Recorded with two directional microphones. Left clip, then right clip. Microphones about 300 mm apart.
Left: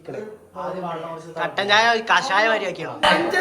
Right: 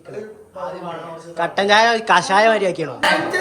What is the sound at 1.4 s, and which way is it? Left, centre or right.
A woman's voice, centre.